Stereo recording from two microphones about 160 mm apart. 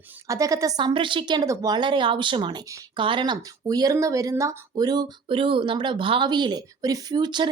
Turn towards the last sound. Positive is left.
turn(degrees=-25)  # may be behind; listen again after turning